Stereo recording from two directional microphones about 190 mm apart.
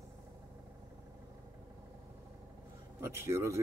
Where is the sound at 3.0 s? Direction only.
15° right (ahead or behind).